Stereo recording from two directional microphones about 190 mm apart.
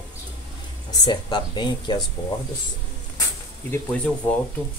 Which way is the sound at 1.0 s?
25° left (ahead or behind).